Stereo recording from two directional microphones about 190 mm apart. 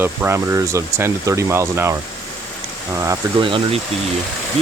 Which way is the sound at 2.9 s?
15° right (ahead or behind).